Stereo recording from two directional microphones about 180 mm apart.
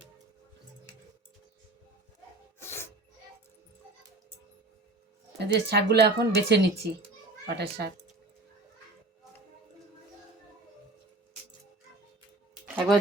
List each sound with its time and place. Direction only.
2.6 s music: 15° left (ahead or behind)
5.4 s a child's voice: 65° right (ahead or behind)
12.6 s music: 5° right (ahead or behind)